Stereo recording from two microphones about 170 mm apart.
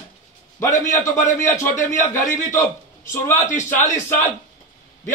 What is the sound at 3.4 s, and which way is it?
Speech, 45° left (ahead or behind).